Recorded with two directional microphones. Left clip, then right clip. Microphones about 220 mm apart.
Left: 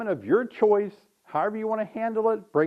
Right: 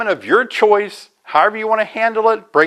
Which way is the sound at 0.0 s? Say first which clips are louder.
Right 10 dB; 10° right (ahead or behind).